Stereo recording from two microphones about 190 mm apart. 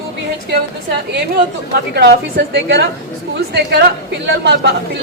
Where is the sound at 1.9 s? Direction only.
60° right (ahead or behind).